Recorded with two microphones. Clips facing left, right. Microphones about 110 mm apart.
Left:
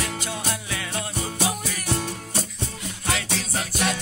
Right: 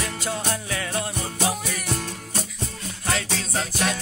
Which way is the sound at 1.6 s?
10° left (ahead or behind).